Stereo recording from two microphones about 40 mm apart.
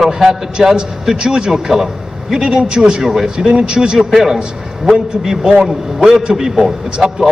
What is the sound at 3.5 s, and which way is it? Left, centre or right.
Speech, right.